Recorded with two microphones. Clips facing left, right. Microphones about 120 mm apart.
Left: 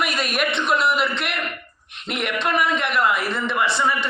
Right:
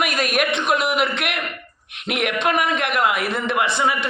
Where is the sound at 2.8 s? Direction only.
55° right (ahead or behind).